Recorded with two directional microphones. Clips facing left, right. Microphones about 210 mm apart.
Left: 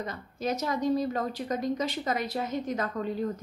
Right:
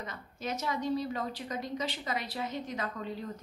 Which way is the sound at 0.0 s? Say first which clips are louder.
Left 7 dB; 40° left (ahead or behind).